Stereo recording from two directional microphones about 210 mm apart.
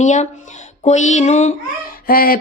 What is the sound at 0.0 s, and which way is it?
A woman's voice, 35° left (ahead or behind).